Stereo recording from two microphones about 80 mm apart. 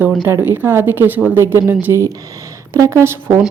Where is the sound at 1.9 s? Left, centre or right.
Right.